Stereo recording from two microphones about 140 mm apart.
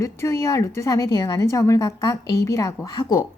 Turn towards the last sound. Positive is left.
turn(degrees=30)  # may be behind; listen again after turning